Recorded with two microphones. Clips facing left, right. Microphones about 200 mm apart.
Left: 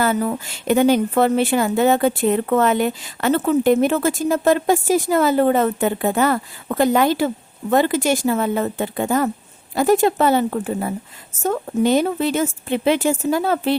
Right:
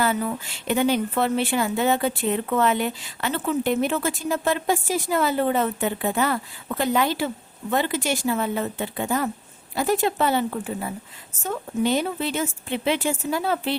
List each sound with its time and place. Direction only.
0.0 s speech: 45° left (ahead or behind)